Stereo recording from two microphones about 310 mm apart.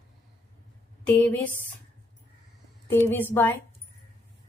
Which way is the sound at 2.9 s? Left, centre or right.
Centre.